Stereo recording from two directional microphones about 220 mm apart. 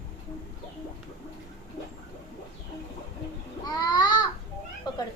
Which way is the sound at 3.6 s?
20° left (ahead or behind).